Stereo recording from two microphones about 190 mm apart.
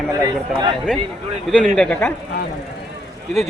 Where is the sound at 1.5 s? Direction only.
5° left (ahead or behind).